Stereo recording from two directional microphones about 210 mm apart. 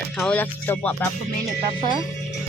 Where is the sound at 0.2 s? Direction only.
5° left (ahead or behind).